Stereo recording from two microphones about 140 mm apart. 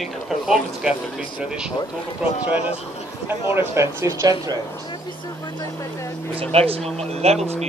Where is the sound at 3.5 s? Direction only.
20° right (ahead or behind).